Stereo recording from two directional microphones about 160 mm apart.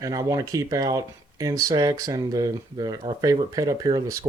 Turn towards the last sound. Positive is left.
turn(degrees=-25)  # may be behind; listen again after turning